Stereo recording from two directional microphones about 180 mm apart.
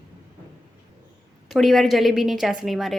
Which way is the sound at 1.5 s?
Centre (ahead or behind).